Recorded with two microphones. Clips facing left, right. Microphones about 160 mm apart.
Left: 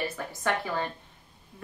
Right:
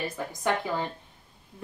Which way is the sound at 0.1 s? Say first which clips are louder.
Right 2 dB; 15° right (ahead or behind).